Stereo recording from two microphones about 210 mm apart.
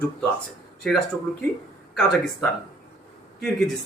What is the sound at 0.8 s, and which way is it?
Speech, centre (ahead or behind).